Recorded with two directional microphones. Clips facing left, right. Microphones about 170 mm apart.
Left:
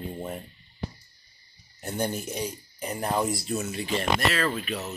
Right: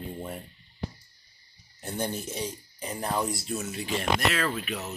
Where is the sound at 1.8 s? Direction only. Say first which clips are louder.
Left 2 dB; 5° left (ahead or behind).